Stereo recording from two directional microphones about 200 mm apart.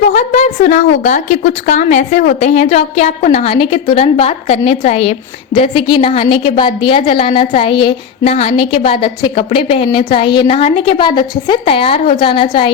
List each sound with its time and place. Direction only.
0.1 s a woman's voice: 35° left (ahead or behind)